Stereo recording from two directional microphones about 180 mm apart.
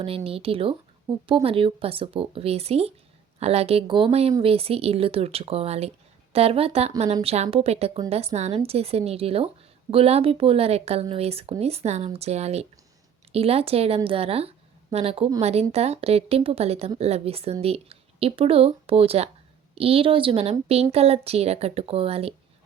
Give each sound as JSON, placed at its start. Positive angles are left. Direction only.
{"t": 0.3, "sound": "speech", "side_deg": -30}